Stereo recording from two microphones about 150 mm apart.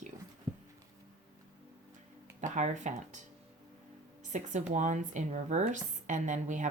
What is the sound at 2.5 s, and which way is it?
Speech, 55° right (ahead or behind).